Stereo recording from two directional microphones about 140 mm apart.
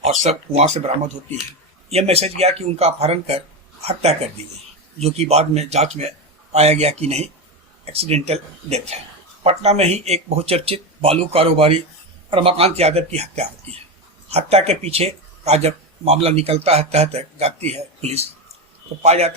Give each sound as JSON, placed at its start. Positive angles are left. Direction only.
{"t": 0.0, "sound": "speech", "side_deg": -50}